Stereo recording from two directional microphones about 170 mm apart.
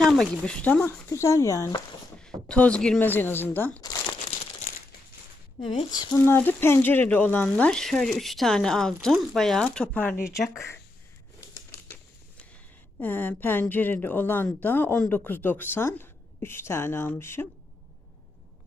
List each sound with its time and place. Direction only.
0.0 s a woman's voice: 5° left (ahead or behind); by 1.8 s 20° left (ahead or behind)
2.2 s a woman's voice: 5° left (ahead or behind)
3.8 s crumpling: 20° left (ahead or behind)
4.6 s crumpling: 45° left (ahead or behind)
5.6 s speech: 25° left (ahead or behind)
6.1 s a woman's voice: 10° left (ahead or behind)
13.0 s a woman's voice: 10° left (ahead or behind)